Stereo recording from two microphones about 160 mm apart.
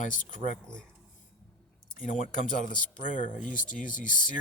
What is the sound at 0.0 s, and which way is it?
Speech, 50° left (ahead or behind).